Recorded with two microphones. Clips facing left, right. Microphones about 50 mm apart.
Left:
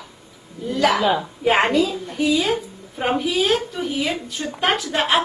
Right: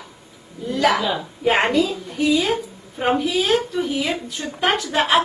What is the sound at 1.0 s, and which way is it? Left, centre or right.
Speech, left.